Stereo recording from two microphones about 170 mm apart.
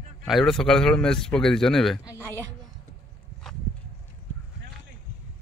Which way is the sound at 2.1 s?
10° left (ahead or behind).